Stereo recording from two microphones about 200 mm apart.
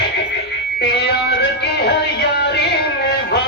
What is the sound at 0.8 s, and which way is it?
Music, 55° left (ahead or behind).